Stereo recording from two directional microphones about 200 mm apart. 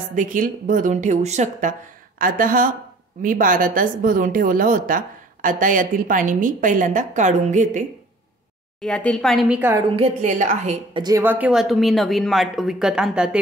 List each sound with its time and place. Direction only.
0.1 s speech: 40° right (ahead or behind)
8.8 s speech: 5° left (ahead or behind)
9.8 s speech: 35° right (ahead or behind)
10.9 s speech: 20° right (ahead or behind)